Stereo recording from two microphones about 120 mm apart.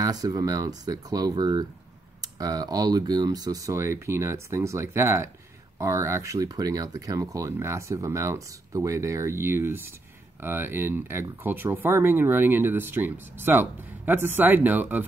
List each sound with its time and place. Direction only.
0.0 s speech: 30° right (ahead or behind); by 15.0 s 15° right (ahead or behind)